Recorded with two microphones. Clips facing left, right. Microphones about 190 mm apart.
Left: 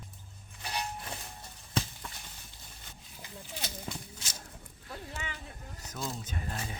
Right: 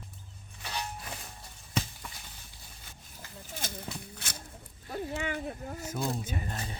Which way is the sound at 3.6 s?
50° right (ahead or behind).